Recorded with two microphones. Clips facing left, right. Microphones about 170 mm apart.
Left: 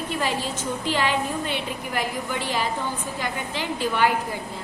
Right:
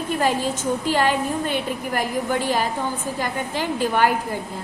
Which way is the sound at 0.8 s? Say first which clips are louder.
Right 3 dB; 45° right (ahead or behind).